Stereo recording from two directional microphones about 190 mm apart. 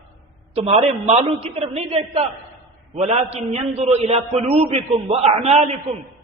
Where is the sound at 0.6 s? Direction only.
35° right (ahead or behind).